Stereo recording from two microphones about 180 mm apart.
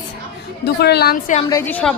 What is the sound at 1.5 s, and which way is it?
Speech, 10° left (ahead or behind).